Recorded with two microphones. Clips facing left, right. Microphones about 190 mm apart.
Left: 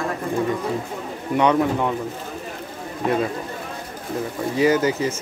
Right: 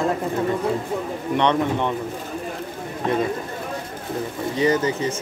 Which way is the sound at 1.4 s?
10° left (ahead or behind).